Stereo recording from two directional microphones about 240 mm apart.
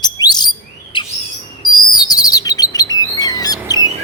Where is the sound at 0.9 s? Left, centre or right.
Centre.